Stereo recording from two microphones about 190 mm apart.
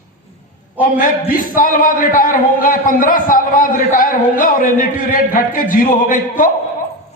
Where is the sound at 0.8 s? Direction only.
45° left (ahead or behind).